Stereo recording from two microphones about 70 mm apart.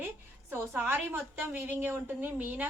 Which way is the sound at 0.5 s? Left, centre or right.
Right.